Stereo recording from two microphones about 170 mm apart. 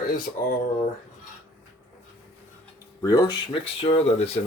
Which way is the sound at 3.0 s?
20° left (ahead or behind).